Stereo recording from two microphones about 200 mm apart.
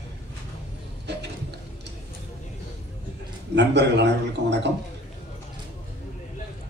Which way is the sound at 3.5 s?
60° right (ahead or behind).